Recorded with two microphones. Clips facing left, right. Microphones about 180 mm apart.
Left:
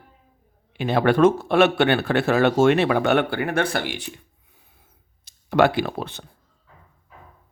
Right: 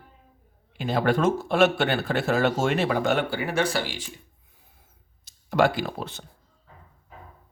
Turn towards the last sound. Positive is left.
turn(degrees=60)  # may be behind; listen again after turning